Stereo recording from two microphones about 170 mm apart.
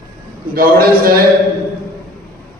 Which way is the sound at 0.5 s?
60° right (ahead or behind).